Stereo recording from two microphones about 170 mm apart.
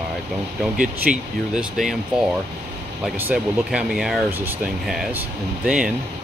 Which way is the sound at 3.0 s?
5° right (ahead or behind).